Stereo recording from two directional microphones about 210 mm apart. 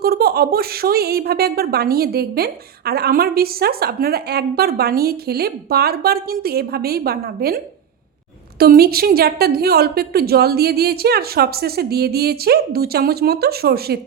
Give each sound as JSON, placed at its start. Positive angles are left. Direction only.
{"t": 0.0, "sound": "speech", "side_deg": -45}